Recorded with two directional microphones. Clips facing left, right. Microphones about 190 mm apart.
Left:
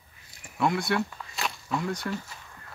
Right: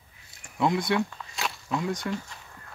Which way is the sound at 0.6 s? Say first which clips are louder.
Right 1 dB; 20° right (ahead or behind).